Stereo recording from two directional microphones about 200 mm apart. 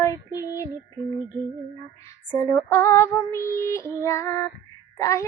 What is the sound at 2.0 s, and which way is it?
Female singing, 10° left (ahead or behind).